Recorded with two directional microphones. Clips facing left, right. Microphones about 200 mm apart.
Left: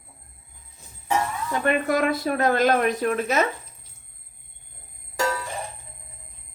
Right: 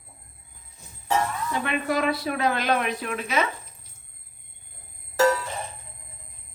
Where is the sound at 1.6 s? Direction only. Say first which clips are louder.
Left 4 dB; 50° left (ahead or behind).